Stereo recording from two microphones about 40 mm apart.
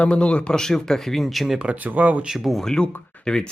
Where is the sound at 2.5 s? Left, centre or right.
Centre.